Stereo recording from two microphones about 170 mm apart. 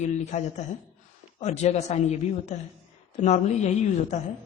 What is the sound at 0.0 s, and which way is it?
A woman's voice, 45° left (ahead or behind).